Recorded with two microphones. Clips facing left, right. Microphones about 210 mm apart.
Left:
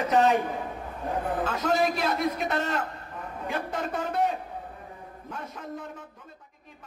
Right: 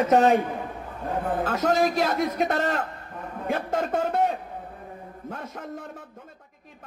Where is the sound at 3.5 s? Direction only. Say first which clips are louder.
Right 5 dB; 50° right (ahead or behind).